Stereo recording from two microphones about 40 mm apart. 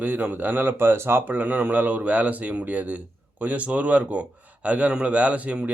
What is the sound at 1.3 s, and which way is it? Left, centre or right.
A man's voice, right.